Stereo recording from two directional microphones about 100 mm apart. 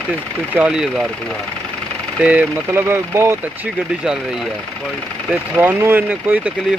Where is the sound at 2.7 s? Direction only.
25° right (ahead or behind).